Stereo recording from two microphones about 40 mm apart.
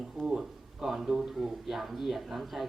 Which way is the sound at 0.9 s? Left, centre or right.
Centre.